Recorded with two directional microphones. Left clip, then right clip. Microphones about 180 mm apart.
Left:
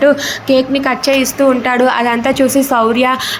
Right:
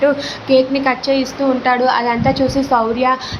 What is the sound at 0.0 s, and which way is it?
A woman's voice, 20° left (ahead or behind).